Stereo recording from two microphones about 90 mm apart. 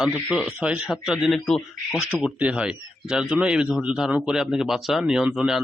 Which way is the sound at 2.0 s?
15° right (ahead or behind).